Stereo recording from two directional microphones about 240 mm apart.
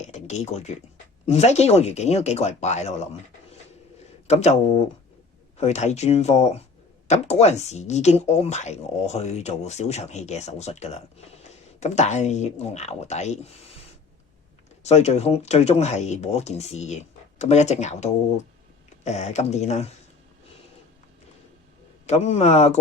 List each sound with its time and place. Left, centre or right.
0.0 s a sound: left
1.3 s speech: left
4.3 s speech: left
14.8 s speech: left
22.0 s speech: left